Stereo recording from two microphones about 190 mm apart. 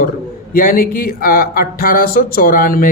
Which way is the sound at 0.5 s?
50° left (ahead or behind).